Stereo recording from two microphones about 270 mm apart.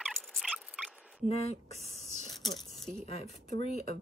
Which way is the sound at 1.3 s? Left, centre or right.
Left.